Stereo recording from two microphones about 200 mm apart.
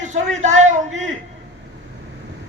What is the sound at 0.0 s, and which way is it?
A man's voice, 35° right (ahead or behind).